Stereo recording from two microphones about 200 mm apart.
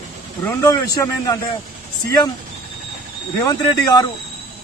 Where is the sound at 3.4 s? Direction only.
20° left (ahead or behind).